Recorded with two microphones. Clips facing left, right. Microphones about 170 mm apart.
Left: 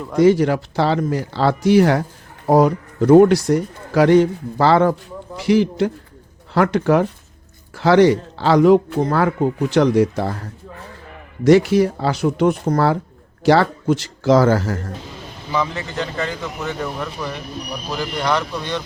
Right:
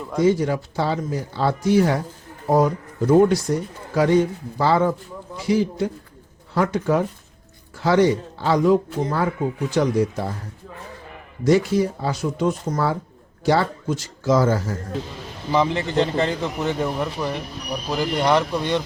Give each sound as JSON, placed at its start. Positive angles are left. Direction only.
{"t": 0.2, "sound": "a man's voice", "side_deg": 80}
{"t": 11.4, "sound": "a man's voice", "side_deg": 80}
{"t": 13.4, "sound": "a man's voice", "side_deg": 80}
{"t": 15.5, "sound": "a man's voice", "side_deg": -25}